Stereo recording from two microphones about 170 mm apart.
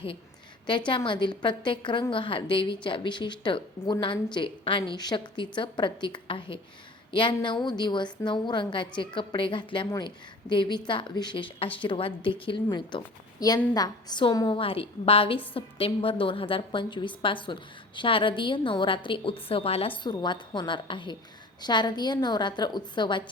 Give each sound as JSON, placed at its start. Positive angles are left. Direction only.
{"t": 0.9, "sound": "a woman's voice", "side_deg": 30}